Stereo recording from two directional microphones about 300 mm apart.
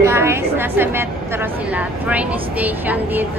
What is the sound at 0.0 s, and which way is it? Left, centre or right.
A woman's voice, centre.